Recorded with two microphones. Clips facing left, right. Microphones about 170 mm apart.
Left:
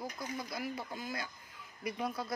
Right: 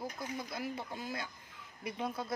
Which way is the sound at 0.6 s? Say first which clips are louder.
Even; 25° right (ahead or behind).